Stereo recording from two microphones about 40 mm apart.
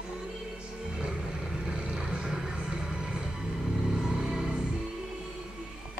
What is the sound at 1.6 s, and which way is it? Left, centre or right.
Vehicle, right.